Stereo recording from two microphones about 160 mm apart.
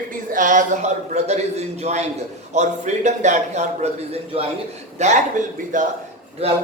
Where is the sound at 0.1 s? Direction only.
55° right (ahead or behind).